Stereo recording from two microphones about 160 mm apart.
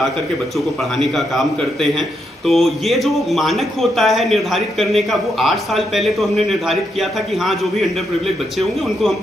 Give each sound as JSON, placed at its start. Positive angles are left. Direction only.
{"t": 0.9, "sound": "a man's voice", "side_deg": 0}